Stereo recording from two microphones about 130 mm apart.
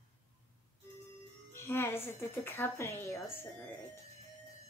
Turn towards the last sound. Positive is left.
turn(degrees=20)  # may be behind; listen again after turning